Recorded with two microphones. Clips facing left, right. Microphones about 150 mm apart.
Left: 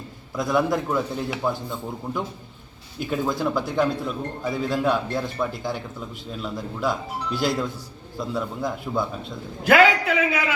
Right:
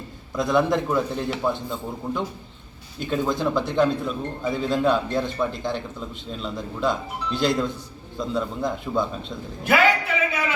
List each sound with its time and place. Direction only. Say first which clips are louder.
0.3 s a man's voice: right 1 dB; 5° left (ahead or behind)
9.6 s a man's voice: left 3 dB; 90° left